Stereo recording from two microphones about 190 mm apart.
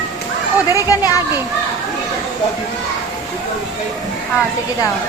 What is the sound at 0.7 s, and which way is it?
Speech, 20° left (ahead or behind).